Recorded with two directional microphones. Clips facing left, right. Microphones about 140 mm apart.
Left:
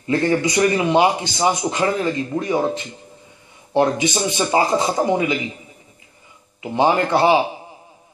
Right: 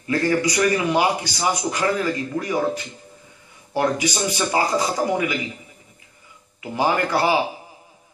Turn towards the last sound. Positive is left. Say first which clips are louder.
# left 4 dB
turn(degrees=25)  # may be behind; listen again after turning